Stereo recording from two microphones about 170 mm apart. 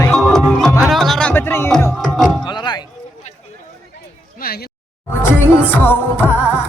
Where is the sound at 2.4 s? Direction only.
25° left (ahead or behind).